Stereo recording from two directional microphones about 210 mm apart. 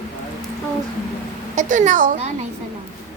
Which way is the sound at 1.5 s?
35° right (ahead or behind).